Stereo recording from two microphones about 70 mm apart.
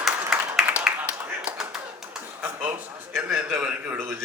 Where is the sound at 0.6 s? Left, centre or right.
Centre.